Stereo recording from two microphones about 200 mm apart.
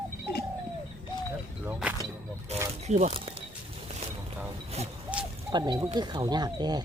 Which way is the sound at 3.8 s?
30° right (ahead or behind).